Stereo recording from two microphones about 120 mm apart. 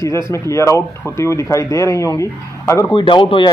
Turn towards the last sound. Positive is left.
turn(degrees=45)  # may be behind; listen again after turning